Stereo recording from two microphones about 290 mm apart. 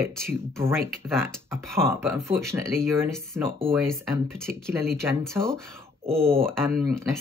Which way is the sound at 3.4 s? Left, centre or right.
Centre.